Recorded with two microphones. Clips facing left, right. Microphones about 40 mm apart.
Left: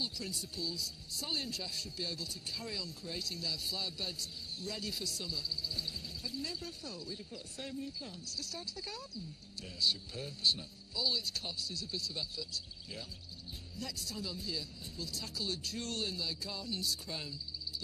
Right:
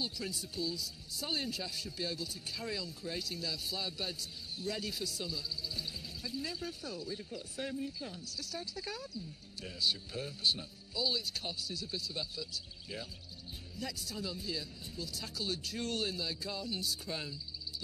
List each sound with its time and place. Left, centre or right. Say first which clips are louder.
0.2 s speech: right 2 dB; centre
13.7 s speech: right 2 dB; centre